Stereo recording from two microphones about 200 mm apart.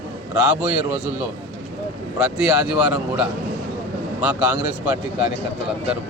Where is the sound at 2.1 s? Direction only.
5° right (ahead or behind).